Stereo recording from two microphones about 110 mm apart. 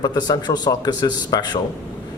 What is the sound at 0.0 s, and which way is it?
Speech, 40° left (ahead or behind).